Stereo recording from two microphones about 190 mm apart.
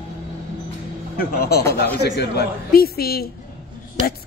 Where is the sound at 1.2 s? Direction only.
55° left (ahead or behind).